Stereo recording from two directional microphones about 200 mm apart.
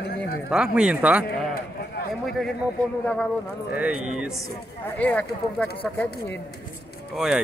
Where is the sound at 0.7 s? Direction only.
5° right (ahead or behind).